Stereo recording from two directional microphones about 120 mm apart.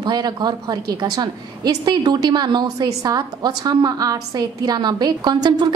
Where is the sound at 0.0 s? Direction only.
35° right (ahead or behind).